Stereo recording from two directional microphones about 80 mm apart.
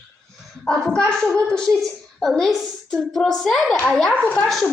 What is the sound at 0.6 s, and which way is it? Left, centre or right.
A child's voice, centre.